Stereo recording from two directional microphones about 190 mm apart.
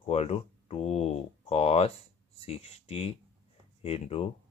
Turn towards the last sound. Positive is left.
turn(degrees=35)  # may be behind; listen again after turning